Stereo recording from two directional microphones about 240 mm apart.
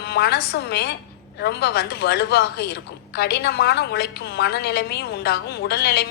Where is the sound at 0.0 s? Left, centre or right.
Left.